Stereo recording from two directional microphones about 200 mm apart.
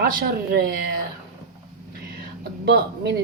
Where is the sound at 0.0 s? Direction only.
50° right (ahead or behind).